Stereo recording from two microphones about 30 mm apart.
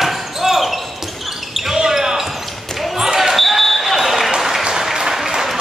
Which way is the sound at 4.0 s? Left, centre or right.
Centre.